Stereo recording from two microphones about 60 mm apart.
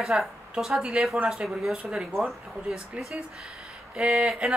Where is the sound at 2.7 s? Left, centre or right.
Centre.